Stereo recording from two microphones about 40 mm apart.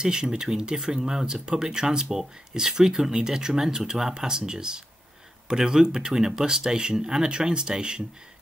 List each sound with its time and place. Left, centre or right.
0.0 s speech: centre